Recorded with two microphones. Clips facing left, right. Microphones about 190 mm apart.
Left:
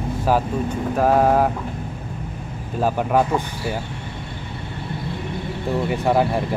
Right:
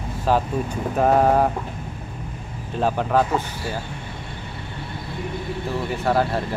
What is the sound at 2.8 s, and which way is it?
Speech, 10° left (ahead or behind).